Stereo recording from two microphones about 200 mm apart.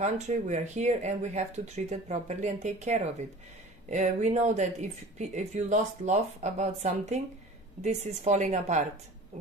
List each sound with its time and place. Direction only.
0.0 s speech: 35° right (ahead or behind)